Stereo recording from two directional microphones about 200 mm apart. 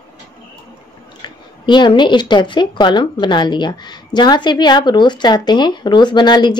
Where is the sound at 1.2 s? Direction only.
25° left (ahead or behind).